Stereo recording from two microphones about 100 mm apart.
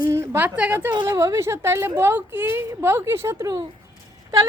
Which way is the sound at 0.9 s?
40° right (ahead or behind).